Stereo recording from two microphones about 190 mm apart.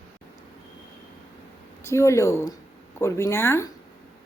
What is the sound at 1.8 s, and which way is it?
A woman's voice, 15° left (ahead or behind).